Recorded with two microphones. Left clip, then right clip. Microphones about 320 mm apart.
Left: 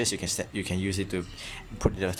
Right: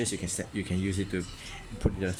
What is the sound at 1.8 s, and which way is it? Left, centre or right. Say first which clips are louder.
Speech: left 5 dB; left.